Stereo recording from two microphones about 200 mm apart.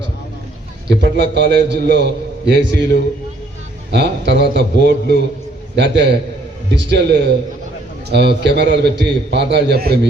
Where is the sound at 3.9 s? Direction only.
55° right (ahead or behind).